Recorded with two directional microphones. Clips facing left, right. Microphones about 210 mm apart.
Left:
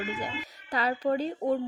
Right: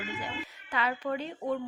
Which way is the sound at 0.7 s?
35° left (ahead or behind).